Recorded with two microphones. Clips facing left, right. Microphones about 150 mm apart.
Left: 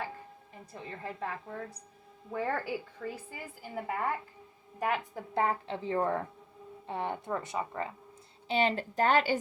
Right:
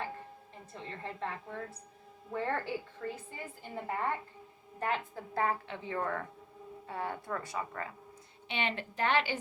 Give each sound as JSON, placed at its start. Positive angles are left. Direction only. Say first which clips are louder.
{"t": 0.8, "sound": "a woman's voice", "louder": "left 1 dB", "side_deg": 10}
{"t": 8.4, "sound": "a woman's voice", "louder": "left 7 dB", "side_deg": 35}